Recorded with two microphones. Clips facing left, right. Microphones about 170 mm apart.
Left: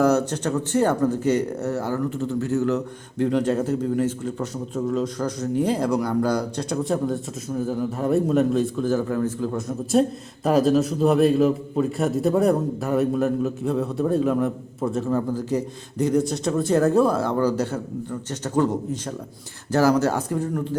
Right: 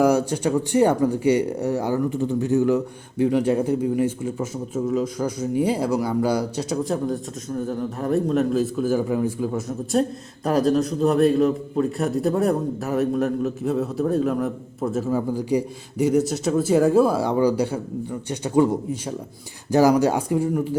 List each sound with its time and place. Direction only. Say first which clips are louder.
0.0 s speech: right 1 dB; 10° right (ahead or behind)
9.6 s a man's voice: left 4 dB; centre (ahead or behind)